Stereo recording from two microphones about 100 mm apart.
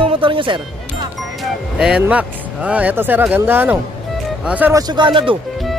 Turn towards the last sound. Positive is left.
turn(degrees=-55)  # may be behind; listen again after turning